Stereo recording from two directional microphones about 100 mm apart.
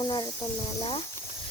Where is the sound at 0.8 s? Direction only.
75° left (ahead or behind).